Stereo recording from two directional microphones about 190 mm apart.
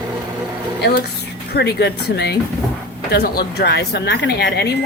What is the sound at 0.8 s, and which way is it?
A woman's voice, 60° left (ahead or behind).